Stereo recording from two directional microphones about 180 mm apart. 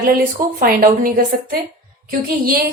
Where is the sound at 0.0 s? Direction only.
55° right (ahead or behind).